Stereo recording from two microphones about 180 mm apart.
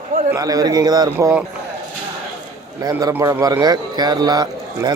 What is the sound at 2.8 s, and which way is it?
A man's voice, 20° right (ahead or behind).